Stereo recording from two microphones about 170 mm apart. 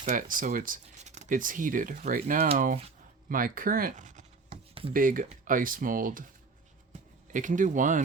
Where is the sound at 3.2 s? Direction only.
55° right (ahead or behind); by 4.9 s 35° right (ahead or behind).